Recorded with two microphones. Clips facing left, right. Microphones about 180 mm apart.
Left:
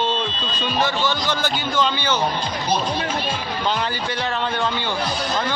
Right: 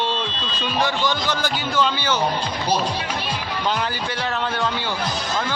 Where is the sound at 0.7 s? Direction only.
15° right (ahead or behind).